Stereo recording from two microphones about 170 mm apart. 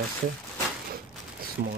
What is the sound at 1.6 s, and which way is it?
Speech, 50° right (ahead or behind).